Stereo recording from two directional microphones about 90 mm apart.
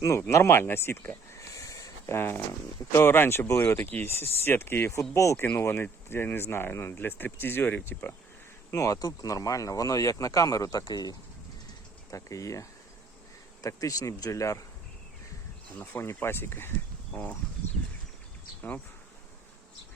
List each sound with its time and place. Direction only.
0.3 s speech: 30° left (ahead or behind)
5.5 s speech: 25° left (ahead or behind)
8.7 s speech: 40° left (ahead or behind)
15.8 s speech: 25° left (ahead or behind)
17.1 s speech: 15° left (ahead or behind)